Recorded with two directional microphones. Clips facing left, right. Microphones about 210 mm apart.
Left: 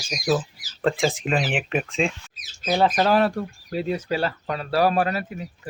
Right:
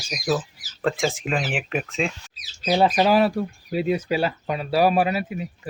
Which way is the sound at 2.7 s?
10° right (ahead or behind).